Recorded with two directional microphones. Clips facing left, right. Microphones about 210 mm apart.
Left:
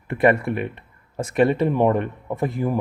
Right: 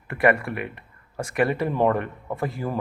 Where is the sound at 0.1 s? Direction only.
20° left (ahead or behind).